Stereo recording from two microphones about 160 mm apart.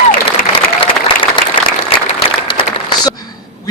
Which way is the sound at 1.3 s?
30° left (ahead or behind).